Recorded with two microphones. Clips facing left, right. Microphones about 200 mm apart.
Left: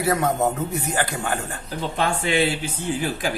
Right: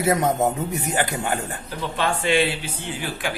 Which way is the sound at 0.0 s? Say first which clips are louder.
Right 1 dB; 20° right (ahead or behind).